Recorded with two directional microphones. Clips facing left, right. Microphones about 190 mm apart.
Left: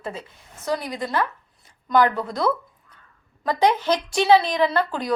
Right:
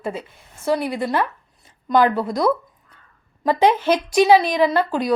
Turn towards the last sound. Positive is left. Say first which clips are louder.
# right 3 dB
turn(degrees=-15)  # may be behind; listen again after turning